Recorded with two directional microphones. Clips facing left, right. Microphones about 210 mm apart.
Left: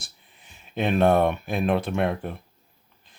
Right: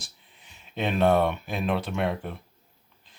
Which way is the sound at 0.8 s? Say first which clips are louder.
Left 2 dB; 50° left (ahead or behind).